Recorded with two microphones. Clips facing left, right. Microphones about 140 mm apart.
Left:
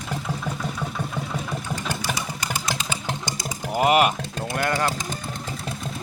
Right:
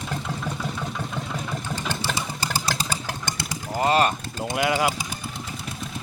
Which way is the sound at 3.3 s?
65° right (ahead or behind).